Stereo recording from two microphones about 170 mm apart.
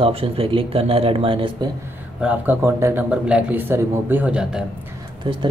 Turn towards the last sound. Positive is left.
turn(degrees=-30)  # may be behind; listen again after turning